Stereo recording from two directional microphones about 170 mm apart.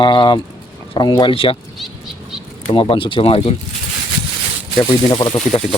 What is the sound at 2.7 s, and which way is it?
Speech, 30° left (ahead or behind).